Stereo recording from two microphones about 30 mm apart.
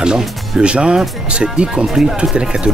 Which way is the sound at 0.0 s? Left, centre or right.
Right.